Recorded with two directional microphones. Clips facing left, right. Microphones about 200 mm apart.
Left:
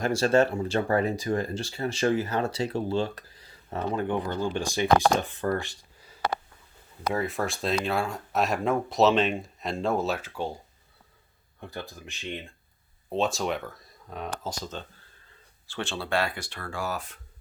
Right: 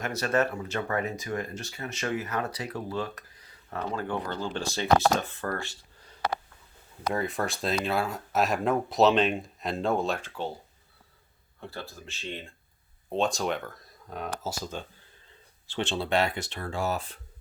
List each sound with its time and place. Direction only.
0.0 s speech: 30° left (ahead or behind); by 6.1 s 15° left (ahead or behind)
7.1 s speech: centre (ahead or behind)
11.7 s speech: 15° left (ahead or behind)
13.1 s speech: centre (ahead or behind)
15.6 s speech: 20° right (ahead or behind)